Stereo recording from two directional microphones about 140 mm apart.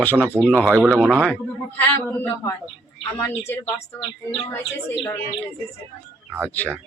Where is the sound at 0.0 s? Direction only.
10° left (ahead or behind).